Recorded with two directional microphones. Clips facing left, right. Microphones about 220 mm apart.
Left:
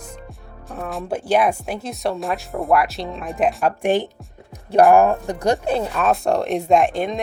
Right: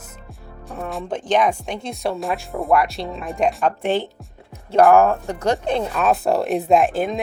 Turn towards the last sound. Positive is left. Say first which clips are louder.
# even
turn(degrees=-5)  # may be behind; listen again after turning